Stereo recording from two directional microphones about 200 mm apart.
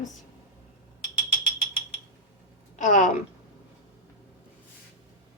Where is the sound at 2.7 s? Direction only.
40° left (ahead or behind).